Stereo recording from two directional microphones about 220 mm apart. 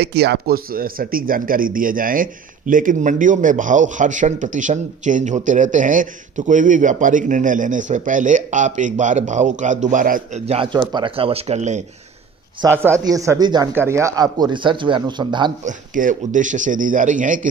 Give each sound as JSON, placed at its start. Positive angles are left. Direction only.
{"t": 0.0, "sound": "speech", "side_deg": -50}
{"t": 12.8, "sound": "speech", "side_deg": -15}
{"t": 15.6, "sound": "speech", "side_deg": -35}